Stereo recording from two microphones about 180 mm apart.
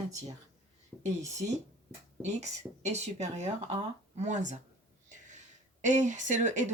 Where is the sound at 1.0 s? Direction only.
40° right (ahead or behind).